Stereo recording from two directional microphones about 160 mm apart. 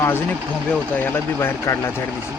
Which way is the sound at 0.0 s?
10° left (ahead or behind).